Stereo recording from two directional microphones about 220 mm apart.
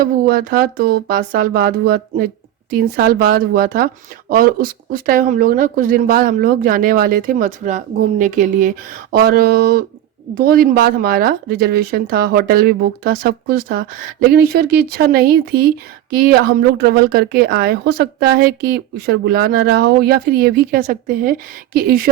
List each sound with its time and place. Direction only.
0.0 s speech: 40° right (ahead or behind)